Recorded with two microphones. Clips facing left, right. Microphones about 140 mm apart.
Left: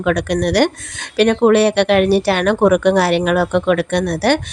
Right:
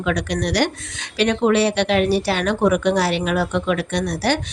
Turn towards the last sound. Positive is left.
turn(degrees=60)  # may be behind; listen again after turning